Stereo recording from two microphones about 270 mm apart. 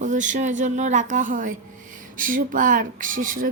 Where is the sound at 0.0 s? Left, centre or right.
Right.